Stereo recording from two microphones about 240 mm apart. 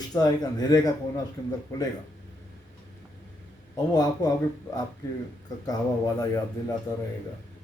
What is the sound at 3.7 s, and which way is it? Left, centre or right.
Speech, centre.